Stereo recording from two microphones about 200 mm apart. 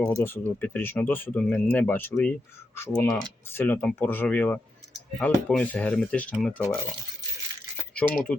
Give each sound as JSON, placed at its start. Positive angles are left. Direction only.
{"t": 0.0, "sound": "speech", "side_deg": 10}
{"t": 7.9, "sound": "speech", "side_deg": 5}